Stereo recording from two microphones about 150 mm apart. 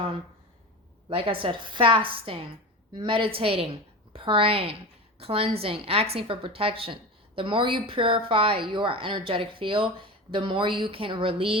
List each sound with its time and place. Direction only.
1.1 s a woman's voice: 35° right (ahead or behind)